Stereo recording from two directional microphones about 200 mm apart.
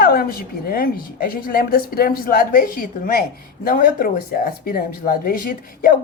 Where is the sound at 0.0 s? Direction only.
50° left (ahead or behind).